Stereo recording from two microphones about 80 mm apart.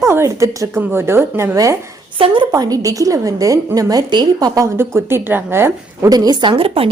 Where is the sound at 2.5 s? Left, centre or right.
Right.